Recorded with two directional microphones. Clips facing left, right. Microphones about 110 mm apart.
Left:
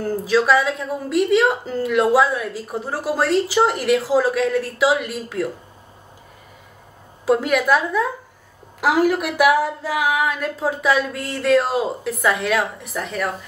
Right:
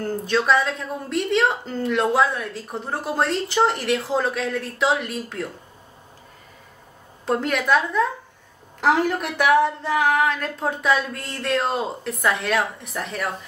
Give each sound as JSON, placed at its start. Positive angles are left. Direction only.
{"t": 0.0, "sound": "speech", "side_deg": 5}
{"t": 7.2, "sound": "speech", "side_deg": 5}